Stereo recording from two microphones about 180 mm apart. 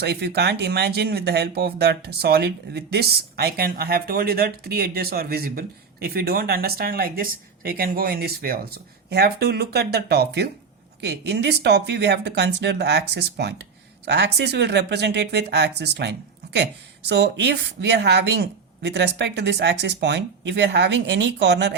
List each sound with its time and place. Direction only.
0.0 s speech: 65° right (ahead or behind)